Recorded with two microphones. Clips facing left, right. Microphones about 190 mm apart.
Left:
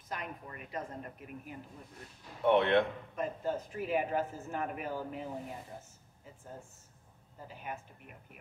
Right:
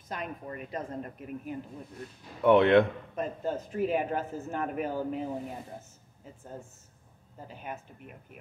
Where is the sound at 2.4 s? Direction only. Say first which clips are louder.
Right 6 dB; 70° right (ahead or behind).